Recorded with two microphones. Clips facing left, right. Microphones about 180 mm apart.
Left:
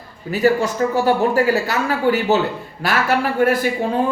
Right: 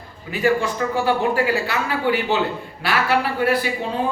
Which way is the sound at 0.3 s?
40° left (ahead or behind).